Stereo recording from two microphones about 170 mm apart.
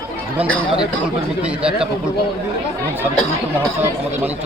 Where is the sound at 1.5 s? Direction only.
5° right (ahead or behind).